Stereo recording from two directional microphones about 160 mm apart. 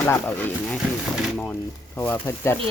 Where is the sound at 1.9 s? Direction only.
15° left (ahead or behind).